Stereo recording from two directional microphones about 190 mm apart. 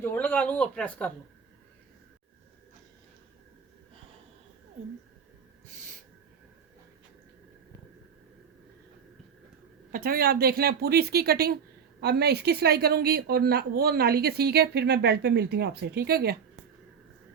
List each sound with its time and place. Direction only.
0.0 s speech: 10° left (ahead or behind)
9.9 s a woman's voice: 50° right (ahead or behind)